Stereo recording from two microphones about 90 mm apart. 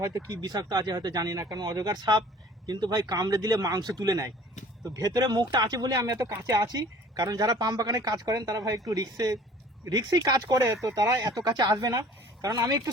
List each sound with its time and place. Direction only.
0.3 s speech: 45° right (ahead or behind)